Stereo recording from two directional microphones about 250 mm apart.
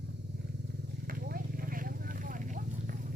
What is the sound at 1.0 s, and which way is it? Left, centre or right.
Vehicle, right.